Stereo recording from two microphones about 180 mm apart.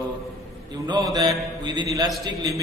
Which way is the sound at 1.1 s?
25° right (ahead or behind).